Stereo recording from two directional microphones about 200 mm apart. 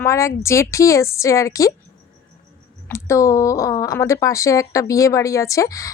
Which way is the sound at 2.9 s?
15° left (ahead or behind).